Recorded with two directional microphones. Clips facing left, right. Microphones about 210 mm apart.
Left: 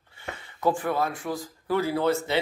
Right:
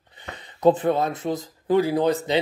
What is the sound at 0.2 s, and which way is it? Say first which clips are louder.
A man's voice: right 7 dB; 20° right (ahead or behind).